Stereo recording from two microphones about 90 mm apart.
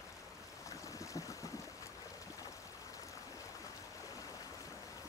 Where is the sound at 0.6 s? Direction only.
35° left (ahead or behind).